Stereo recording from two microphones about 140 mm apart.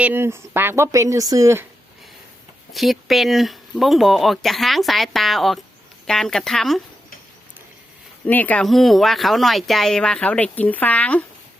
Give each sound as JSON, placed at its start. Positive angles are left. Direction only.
{"t": 0.0, "sound": "speech", "side_deg": -15}
{"t": 2.7, "sound": "speech", "side_deg": 0}
{"t": 8.3, "sound": "speech", "side_deg": 10}
{"t": 8.6, "sound": "speech", "side_deg": 0}